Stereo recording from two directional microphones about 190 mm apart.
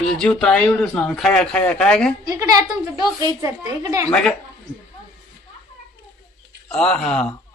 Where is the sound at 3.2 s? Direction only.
20° right (ahead or behind).